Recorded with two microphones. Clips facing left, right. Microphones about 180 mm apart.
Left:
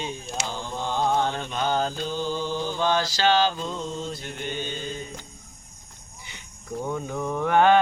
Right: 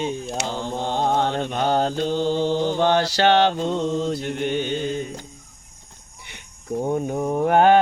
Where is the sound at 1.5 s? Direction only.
55° right (ahead or behind).